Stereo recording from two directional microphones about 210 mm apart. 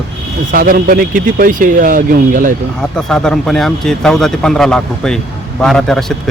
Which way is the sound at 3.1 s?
5° left (ahead or behind).